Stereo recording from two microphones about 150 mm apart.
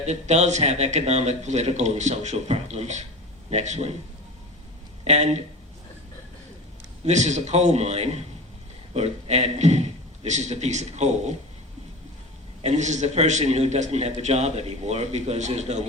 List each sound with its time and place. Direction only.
0.0 s a man's voice: 50° right (ahead or behind)
5.0 s a man's voice: 50° right (ahead or behind)
7.0 s a man's voice: 50° right (ahead or behind)
12.6 s a man's voice: 50° right (ahead or behind)